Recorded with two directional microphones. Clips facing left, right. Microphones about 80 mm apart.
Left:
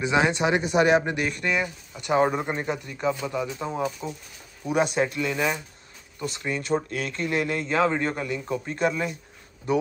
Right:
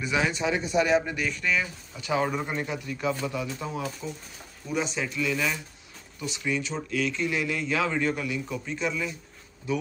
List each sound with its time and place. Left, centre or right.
0.0 s speech: left
0.3 s speech: left
1.4 s speech: centre
2.1 s a man's voice: left
2.9 s speech: centre
4.6 s speech: left
5.3 s speech: left
6.1 s a man's voice: left